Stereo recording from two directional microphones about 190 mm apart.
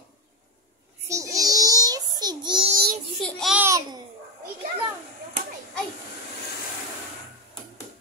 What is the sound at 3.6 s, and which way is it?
Babbling, 15° right (ahead or behind).